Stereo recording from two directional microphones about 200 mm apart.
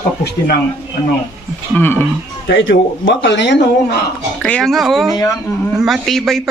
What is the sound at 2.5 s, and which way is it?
Speech, 70° left (ahead or behind).